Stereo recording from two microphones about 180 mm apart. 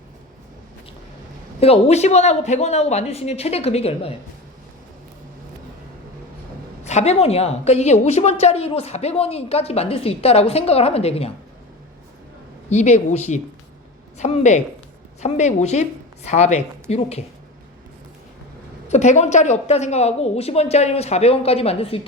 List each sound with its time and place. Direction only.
1.6 s a woman's voice: 35° left (ahead or behind)
6.8 s a woman's voice: 40° left (ahead or behind)
12.7 s a woman's voice: 40° left (ahead or behind)
18.9 s a woman's voice: 40° left (ahead or behind)